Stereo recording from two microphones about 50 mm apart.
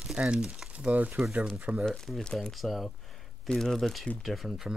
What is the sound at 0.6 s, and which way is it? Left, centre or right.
Speech, right.